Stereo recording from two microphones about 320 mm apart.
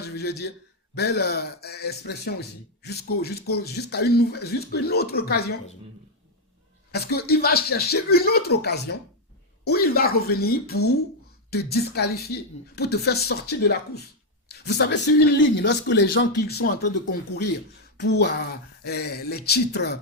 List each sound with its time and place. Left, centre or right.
0.0 s a man's voice: left
6.9 s a man's voice: left